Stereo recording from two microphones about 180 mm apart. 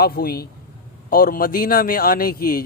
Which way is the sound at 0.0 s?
55° left (ahead or behind).